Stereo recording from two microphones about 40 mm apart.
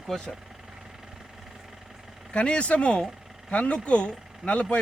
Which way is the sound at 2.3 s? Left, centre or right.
Left.